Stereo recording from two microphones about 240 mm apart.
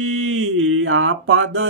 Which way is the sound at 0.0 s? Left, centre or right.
Right.